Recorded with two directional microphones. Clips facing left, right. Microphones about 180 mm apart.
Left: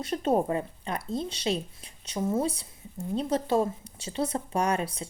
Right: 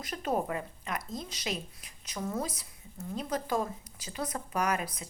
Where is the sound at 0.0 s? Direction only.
30° left (ahead or behind).